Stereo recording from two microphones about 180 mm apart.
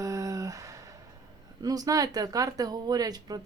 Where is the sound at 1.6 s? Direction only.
20° right (ahead or behind).